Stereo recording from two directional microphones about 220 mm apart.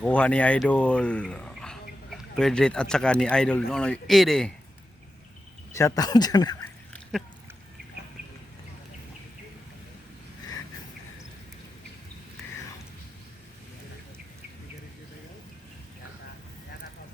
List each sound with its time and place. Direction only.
0.0 s a man's voice: 5° left (ahead or behind)
5.7 s speech: 15° left (ahead or behind)